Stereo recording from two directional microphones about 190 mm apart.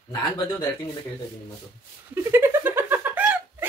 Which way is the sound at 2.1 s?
10° right (ahead or behind).